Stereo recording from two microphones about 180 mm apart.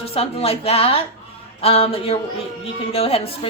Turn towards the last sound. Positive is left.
turn(degrees=35)  # may be behind; listen again after turning